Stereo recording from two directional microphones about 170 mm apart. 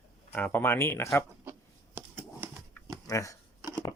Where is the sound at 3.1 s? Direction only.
20° left (ahead or behind).